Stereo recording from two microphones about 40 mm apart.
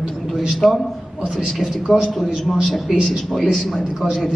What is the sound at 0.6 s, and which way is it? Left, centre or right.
Speech, left.